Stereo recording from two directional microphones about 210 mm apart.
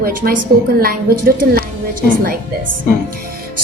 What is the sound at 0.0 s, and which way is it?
Speech, 45° right (ahead or behind).